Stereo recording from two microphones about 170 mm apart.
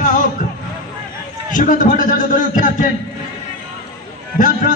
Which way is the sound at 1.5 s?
50° left (ahead or behind).